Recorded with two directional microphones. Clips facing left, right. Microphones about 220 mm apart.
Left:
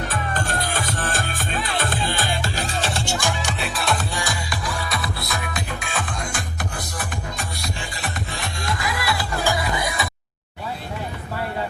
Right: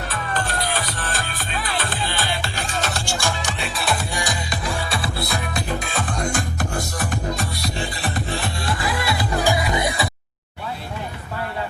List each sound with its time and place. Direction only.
0.1 s music: 45° left (ahead or behind)
2.8 s music: 25° left (ahead or behind)
3.6 s music: centre (ahead or behind)
4.1 s music: 15° right (ahead or behind)
9.8 s a sound: 25° right (ahead or behind)